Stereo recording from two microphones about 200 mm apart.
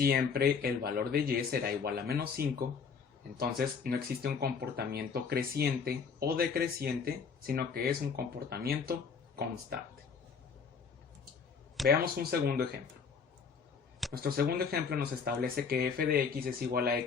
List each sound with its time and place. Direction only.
0.0 s speech: 50° right (ahead or behind)
11.8 s speech: centre (ahead or behind)
12.3 s speech: 50° right (ahead or behind)
14.1 s speech: 50° right (ahead or behind)